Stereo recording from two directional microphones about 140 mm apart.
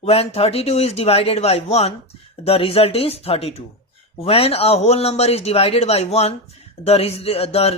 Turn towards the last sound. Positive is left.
turn(degrees=45)  # may be behind; listen again after turning